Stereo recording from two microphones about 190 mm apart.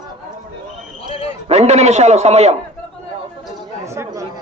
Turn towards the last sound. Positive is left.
turn(degrees=-15)  # may be behind; listen again after turning